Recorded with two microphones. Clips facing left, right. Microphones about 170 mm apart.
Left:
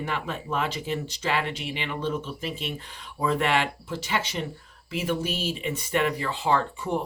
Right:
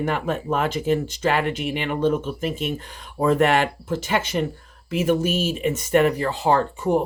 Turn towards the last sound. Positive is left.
turn(degrees=-40)  # may be behind; listen again after turning